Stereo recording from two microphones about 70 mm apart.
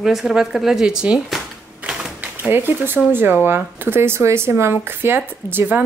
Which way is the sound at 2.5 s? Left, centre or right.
Right.